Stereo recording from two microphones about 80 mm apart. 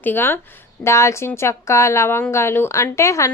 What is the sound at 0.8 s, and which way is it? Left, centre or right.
A woman's voice, left.